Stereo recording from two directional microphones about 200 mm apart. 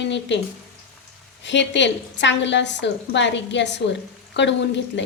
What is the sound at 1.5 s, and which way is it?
A woman's voice, 65° left (ahead or behind).